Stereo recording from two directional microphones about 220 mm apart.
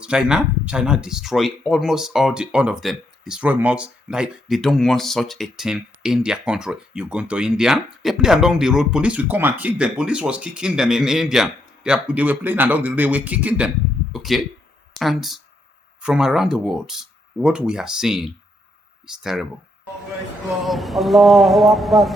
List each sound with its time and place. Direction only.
0.0 s speech: 5° right (ahead or behind)
20.7 s speech: centre (ahead or behind)